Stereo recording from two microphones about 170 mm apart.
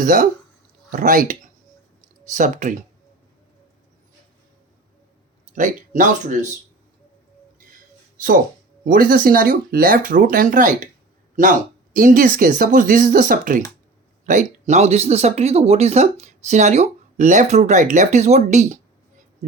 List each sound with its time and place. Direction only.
0.0 s speech: 50° right (ahead or behind)
5.5 s speech: 50° right (ahead or behind)
8.8 s speech: 55° right (ahead or behind)
11.9 s speech: 55° right (ahead or behind)
14.7 s speech: 40° right (ahead or behind)